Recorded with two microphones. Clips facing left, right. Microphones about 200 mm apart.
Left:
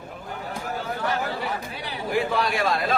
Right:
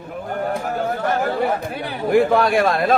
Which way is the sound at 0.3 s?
55° right (ahead or behind).